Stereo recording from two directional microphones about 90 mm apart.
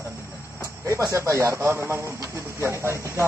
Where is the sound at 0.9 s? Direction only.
35° right (ahead or behind).